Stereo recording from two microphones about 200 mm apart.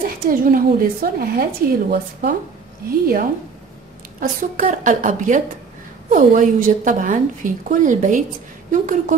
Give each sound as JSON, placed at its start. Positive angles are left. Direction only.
{"t": 0.0, "sound": "a woman's voice", "side_deg": -45}